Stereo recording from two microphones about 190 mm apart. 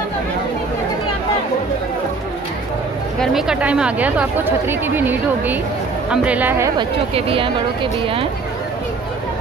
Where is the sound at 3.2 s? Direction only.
Centre (ahead or behind).